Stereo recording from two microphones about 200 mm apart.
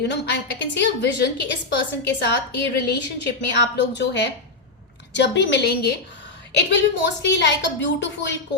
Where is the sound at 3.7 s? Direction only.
60° left (ahead or behind).